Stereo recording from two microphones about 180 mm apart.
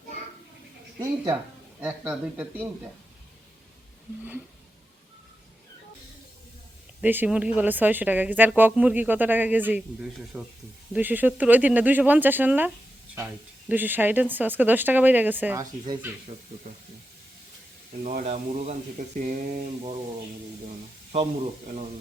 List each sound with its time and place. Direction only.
0.9 s speech: 15° right (ahead or behind)
7.0 s speech: 10° right (ahead or behind)
18.0 s speech: 45° right (ahead or behind)